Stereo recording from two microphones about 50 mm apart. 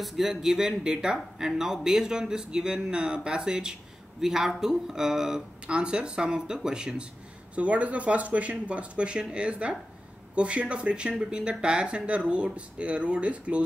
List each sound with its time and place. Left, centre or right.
0.0 s speech: centre
7.5 s speech: right